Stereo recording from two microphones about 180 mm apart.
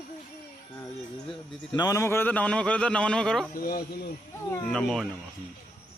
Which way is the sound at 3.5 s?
55° left (ahead or behind).